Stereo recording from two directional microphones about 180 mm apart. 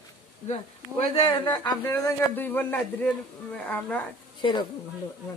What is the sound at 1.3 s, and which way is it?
A man's voice, 25° left (ahead or behind).